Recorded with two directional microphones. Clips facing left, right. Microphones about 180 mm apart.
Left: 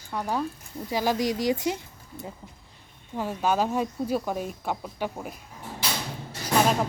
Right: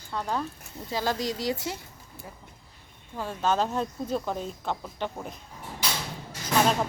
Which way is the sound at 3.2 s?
15° left (ahead or behind).